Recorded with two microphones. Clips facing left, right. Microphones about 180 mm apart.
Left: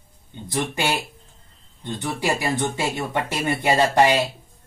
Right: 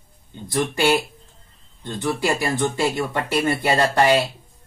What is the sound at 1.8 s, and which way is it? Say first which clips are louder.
Speech: right 3 dB; 20° left (ahead or behind).